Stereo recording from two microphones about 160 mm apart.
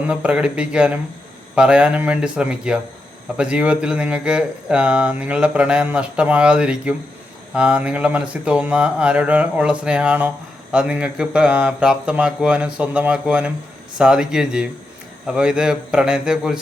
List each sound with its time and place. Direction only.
0.1 s a man's voice: 5° right (ahead or behind)